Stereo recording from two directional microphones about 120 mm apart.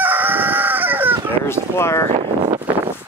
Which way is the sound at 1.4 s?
20° left (ahead or behind).